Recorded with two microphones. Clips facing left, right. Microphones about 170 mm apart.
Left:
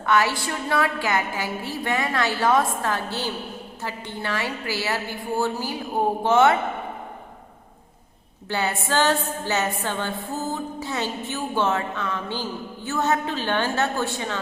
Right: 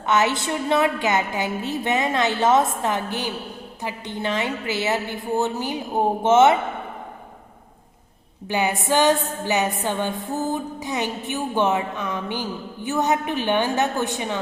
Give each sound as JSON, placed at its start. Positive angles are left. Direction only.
{"t": 0.0, "sound": "a woman's voice", "side_deg": -20}
{"t": 8.4, "sound": "music", "side_deg": -15}